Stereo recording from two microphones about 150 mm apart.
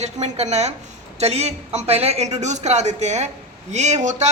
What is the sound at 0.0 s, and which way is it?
A woman's voice, 50° right (ahead or behind).